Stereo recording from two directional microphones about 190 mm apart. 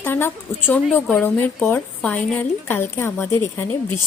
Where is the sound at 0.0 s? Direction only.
10° left (ahead or behind).